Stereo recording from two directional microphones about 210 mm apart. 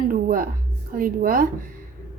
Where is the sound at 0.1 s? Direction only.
40° right (ahead or behind).